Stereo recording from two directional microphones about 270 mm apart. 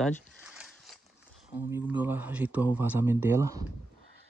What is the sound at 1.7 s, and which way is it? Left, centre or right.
A man's voice, centre.